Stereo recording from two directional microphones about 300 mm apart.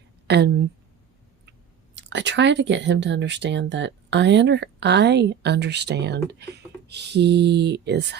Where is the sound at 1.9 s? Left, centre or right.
Right.